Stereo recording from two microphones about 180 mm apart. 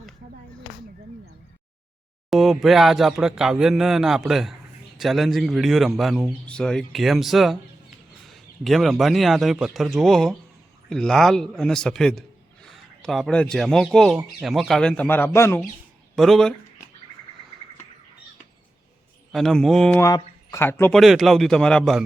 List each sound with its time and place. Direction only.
2.3 s a man's voice: centre (ahead or behind)
8.6 s a man's voice: centre (ahead or behind)
16.1 s speech: centre (ahead or behind)
19.3 s a man's voice: centre (ahead or behind)
20.0 s speech: 20° left (ahead or behind)
21.0 s a man's voice: centre (ahead or behind)